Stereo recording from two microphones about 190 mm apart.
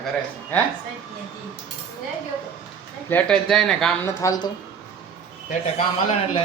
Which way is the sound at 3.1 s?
5° left (ahead or behind).